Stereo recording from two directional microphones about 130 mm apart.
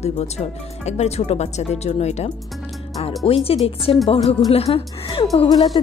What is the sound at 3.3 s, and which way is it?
Speech, 45° left (ahead or behind).